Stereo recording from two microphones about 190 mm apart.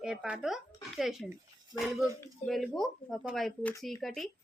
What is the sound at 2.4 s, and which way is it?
A woman's voice, centre (ahead or behind).